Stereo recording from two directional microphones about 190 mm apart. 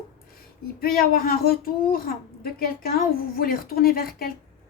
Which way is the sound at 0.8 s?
50° left (ahead or behind).